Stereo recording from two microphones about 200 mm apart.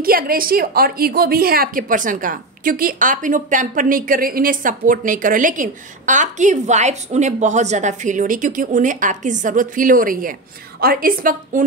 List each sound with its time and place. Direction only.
0.0 s a woman's voice: 45° right (ahead or behind)